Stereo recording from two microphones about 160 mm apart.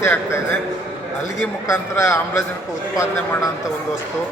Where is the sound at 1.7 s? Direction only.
15° left (ahead or behind).